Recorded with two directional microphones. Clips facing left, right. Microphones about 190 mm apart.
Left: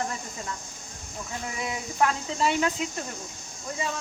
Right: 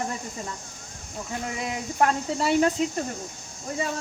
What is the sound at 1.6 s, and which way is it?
Speech, 40° right (ahead or behind).